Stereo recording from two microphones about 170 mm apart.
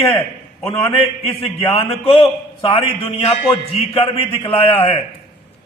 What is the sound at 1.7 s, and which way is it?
A man's voice, 35° left (ahead or behind).